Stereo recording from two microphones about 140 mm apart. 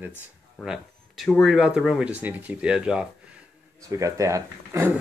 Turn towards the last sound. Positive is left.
turn(degrees=-20)  # may be behind; listen again after turning